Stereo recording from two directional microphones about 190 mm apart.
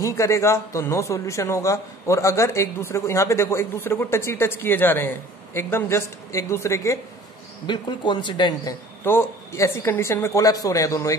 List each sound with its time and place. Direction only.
0.0 s a man's voice: 15° left (ahead or behind)